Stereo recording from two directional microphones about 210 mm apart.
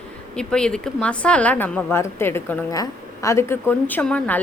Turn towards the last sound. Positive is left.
turn(degrees=5)  # may be behind; listen again after turning